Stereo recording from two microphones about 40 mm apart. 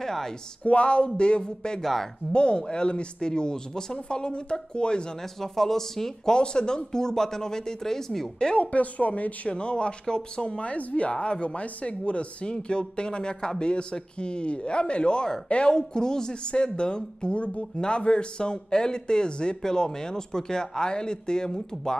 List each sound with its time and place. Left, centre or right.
0.0 s speech: centre
0.7 s speech: left
1.8 s speech: centre
2.3 s speech: left
5.4 s speech: centre
6.3 s speech: left
8.5 s speech: left; by 21.9 s centre